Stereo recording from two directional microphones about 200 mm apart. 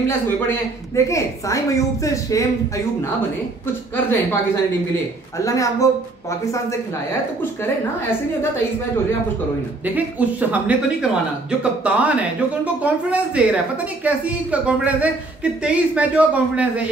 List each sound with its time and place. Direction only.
0.9 s a woman's voice: 15° left (ahead or behind)
3.9 s a woman's voice: 10° left (ahead or behind)
5.4 s a woman's voice: 15° left (ahead or behind)
9.8 s a man's voice: 10° right (ahead or behind)